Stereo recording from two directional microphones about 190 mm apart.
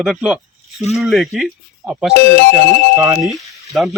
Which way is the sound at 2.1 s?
55° left (ahead or behind).